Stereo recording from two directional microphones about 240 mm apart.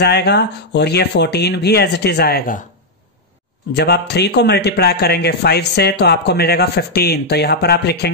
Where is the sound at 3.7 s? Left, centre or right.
Left.